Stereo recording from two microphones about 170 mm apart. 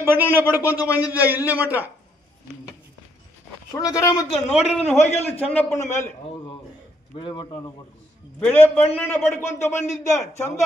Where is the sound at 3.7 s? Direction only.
20° left (ahead or behind).